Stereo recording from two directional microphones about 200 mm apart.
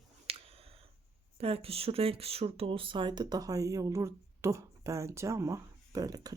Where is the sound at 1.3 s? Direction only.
30° right (ahead or behind).